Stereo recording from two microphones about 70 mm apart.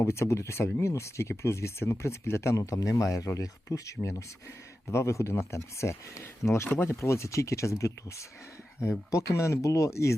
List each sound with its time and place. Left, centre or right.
0.0 s speech: left